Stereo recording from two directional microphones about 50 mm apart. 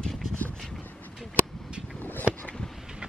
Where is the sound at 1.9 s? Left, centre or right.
Left.